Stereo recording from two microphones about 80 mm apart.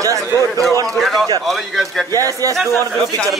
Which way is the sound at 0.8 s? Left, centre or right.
Centre.